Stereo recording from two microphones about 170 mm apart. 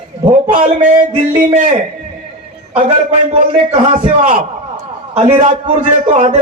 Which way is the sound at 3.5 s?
45° right (ahead or behind).